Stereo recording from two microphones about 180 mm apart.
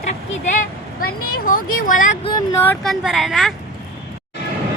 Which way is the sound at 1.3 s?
50° left (ahead or behind).